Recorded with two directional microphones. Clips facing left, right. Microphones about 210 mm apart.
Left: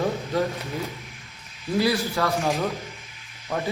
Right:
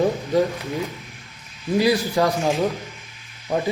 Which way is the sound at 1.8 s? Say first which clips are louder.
Right 4 dB; 15° right (ahead or behind).